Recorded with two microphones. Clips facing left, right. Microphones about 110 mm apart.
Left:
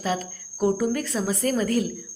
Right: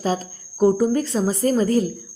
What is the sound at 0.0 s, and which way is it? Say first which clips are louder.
A woman's voice: right 4 dB; 35° right (ahead or behind).